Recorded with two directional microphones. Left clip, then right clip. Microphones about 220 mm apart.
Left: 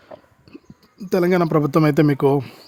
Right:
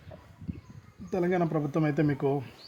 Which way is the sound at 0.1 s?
40° left (ahead or behind).